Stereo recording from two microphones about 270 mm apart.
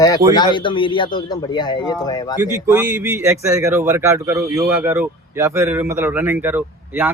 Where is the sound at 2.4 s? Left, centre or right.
Centre.